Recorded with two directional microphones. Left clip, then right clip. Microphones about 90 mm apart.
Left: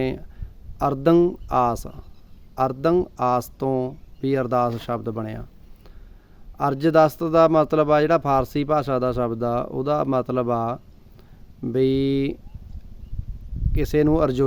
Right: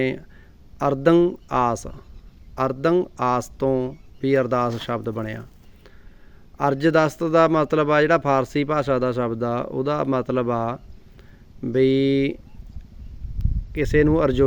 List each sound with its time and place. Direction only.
0.0 s speech: 30° left (ahead or behind)
3.7 s speech: 40° left (ahead or behind)
13.7 s speech: 25° left (ahead or behind)